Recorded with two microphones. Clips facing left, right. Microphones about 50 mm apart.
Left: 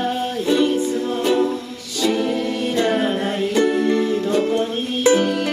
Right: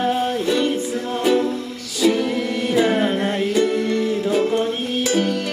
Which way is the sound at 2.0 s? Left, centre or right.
Centre.